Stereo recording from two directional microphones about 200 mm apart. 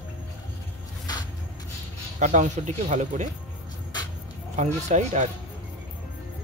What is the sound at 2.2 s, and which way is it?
Speech, 35° right (ahead or behind).